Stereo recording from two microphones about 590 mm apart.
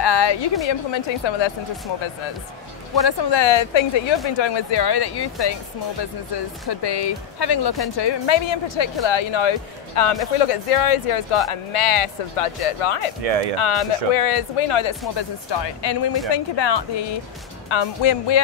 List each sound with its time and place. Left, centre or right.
0.0 s a woman's voice: left
3.1 s speech: left
13.2 s speech: right
13.6 s speech: left